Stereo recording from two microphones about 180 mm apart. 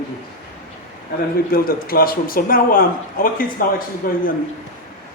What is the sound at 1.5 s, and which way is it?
A man's voice, 55° left (ahead or behind).